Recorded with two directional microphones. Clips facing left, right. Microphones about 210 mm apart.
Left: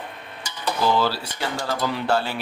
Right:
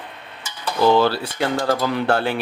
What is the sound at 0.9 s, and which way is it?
Speech, 60° right (ahead or behind).